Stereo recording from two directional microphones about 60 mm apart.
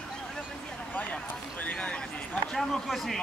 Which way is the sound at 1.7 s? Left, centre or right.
Centre.